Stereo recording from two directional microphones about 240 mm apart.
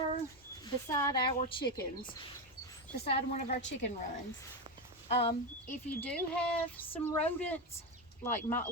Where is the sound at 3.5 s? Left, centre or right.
Left.